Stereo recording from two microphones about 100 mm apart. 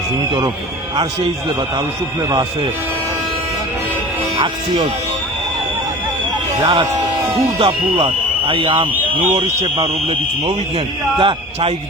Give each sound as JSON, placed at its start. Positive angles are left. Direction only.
{"t": 6.6, "sound": "speech", "side_deg": -40}
{"t": 7.6, "sound": "speech", "side_deg": -60}
{"t": 11.2, "sound": "speech", "side_deg": -60}